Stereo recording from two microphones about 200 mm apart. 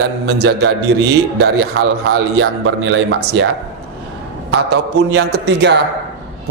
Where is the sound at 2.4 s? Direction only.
70° right (ahead or behind).